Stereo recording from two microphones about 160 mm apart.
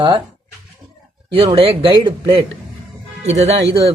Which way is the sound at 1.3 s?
35° right (ahead or behind).